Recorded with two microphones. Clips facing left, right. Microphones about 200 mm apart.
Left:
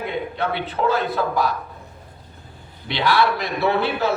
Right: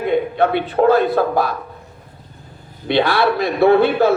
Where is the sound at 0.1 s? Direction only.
55° right (ahead or behind).